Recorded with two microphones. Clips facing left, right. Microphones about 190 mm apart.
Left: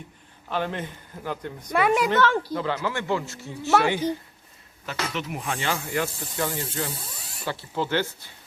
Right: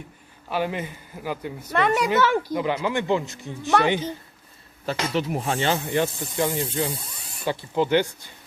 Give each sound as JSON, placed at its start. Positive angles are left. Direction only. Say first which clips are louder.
{"t": 0.5, "sound": "speech", "louder": "right 2 dB", "side_deg": -10}
{"t": 1.7, "sound": "a woman's voice", "louder": "even", "side_deg": 5}
{"t": 2.0, "sound": "speech", "louder": "right 1 dB", "side_deg": -10}
{"t": 4.9, "sound": "speech", "louder": "right 6 dB", "side_deg": -30}